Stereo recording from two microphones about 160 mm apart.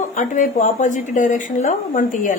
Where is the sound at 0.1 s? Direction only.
50° left (ahead or behind).